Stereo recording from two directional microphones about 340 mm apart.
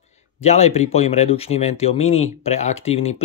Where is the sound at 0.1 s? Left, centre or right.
Centre.